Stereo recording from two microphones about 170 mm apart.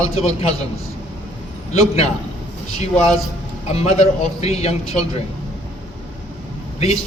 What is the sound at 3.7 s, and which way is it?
A man's voice, 40° left (ahead or behind).